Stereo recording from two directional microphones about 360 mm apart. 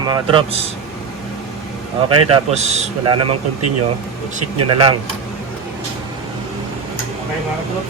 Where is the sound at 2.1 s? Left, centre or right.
Centre.